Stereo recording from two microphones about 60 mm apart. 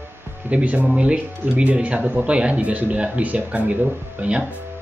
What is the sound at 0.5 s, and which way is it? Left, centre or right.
Speech, right.